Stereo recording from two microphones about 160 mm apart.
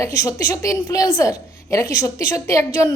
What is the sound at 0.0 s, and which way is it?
A woman's voice, 20° left (ahead or behind).